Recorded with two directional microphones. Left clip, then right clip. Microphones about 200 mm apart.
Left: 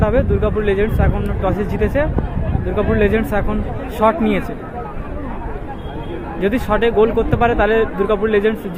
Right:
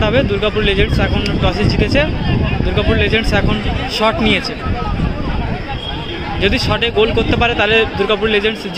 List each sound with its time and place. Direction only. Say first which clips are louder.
0.0 s a man's voice: right 2 dB; 5° right (ahead or behind)
6.4 s a man's voice: right 1 dB; 5° right (ahead or behind)